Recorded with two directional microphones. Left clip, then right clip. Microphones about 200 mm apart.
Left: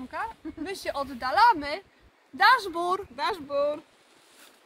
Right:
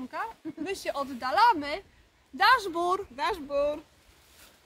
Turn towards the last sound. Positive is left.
turn(degrees=-10)  # may be behind; listen again after turning